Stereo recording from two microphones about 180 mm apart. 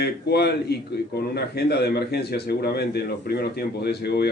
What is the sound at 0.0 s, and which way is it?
A man's voice, 65° left (ahead or behind).